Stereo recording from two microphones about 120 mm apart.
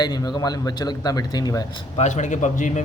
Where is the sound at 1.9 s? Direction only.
80° left.